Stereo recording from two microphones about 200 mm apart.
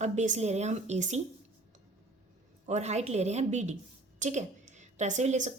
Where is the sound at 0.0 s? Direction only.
35° right (ahead or behind).